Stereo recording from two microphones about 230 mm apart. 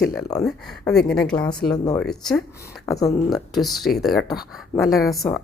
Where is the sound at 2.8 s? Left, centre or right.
Centre.